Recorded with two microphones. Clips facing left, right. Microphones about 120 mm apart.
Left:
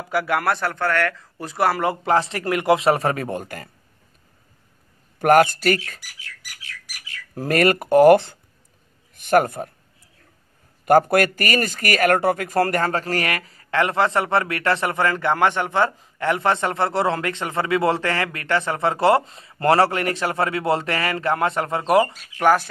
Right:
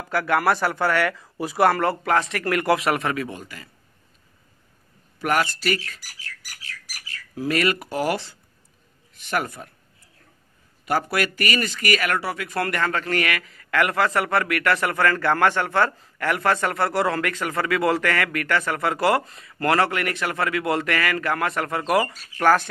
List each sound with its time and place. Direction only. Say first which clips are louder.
0.1 s speech: even; 10° left (ahead or behind)
0.4 s speech: right 1 dB; 5° right (ahead or behind)
1.7 s speech: even; 15° left (ahead or behind)
2.0 s a man's voice: left 2 dB; 30° left (ahead or behind); by 3.7 s 50° left (ahead or behind)
5.2 s speech: left 8 dB; 50° left (ahead or behind)
5.9 s bird: even; 40° right (ahead or behind)
7.3 s a man's voice: left 4 dB; 50° left (ahead or behind)
10.9 s speech: left 8 dB; 50° left (ahead or behind); by 22.1 s 30° left (ahead or behind)
22.4 s speech: left 1 dB; 15° left (ahead or behind)